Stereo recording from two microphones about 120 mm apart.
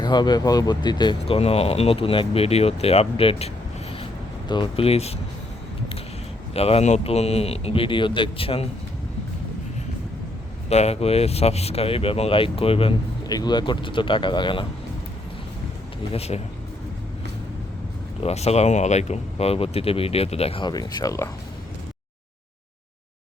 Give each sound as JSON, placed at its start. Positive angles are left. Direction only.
{"t": 0.0, "sound": "speech", "side_deg": 35}
{"t": 1.3, "sound": "speech", "side_deg": 55}
{"t": 4.4, "sound": "speech", "side_deg": 40}
{"t": 6.5, "sound": "speech", "side_deg": 55}
{"t": 10.7, "sound": "speech", "side_deg": 65}
{"t": 13.2, "sound": "speech", "side_deg": 35}
{"t": 16.1, "sound": "speech", "side_deg": 60}
{"t": 18.2, "sound": "speech", "side_deg": 60}
{"t": 20.7, "sound": "speech", "side_deg": 30}